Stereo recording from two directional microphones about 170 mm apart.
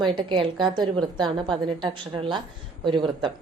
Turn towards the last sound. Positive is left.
turn(degrees=-30)  # may be behind; listen again after turning